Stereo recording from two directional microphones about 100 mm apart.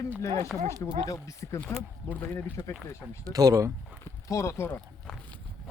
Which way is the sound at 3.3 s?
35° right (ahead or behind).